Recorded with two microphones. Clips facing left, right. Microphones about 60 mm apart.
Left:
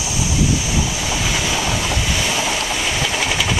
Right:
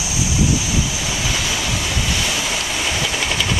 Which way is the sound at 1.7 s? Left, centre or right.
Centre.